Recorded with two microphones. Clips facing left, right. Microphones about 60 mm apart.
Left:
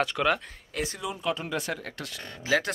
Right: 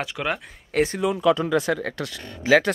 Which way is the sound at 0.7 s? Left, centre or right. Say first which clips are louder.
Right 11 dB; right.